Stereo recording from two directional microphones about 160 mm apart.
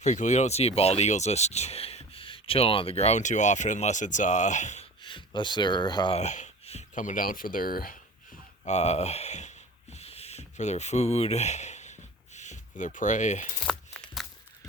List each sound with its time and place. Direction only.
0.0 s speech: 45° left (ahead or behind)
5.0 s speech: 30° left (ahead or behind)
6.1 s speech: 45° left (ahead or behind); by 7.9 s 65° left (ahead or behind)
8.6 s speech: 45° left (ahead or behind)
9.9 s a sound: 40° left (ahead or behind)
13.7 s a sound: 5° left (ahead or behind)